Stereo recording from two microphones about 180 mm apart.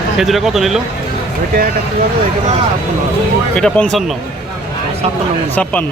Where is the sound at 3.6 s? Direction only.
5° left (ahead or behind).